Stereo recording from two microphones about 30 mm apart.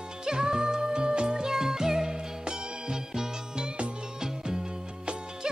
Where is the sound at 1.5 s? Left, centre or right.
Centre.